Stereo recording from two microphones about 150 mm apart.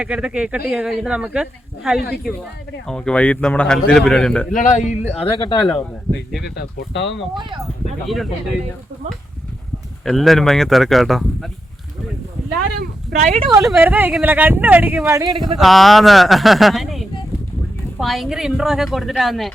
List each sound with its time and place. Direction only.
0.0 s speech: 5° right (ahead or behind)
4.5 s speech: 55° left (ahead or behind); by 5.5 s 35° left (ahead or behind)
5.5 s speech: centre (ahead or behind)
6.4 s speech: 90° left
8.0 s speech: centre (ahead or behind)
10.0 s speech: centre (ahead or behind)
12.5 s a sound: 90° right
13.2 s speech: 45° right (ahead or behind)
13.5 s speech: centre (ahead or behind); by 15.3 s 20° right (ahead or behind)
15.4 s speech: centre (ahead or behind)